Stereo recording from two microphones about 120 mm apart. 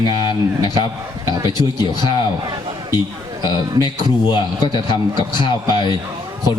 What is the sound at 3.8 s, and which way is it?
A man's voice, 35° left (ahead or behind).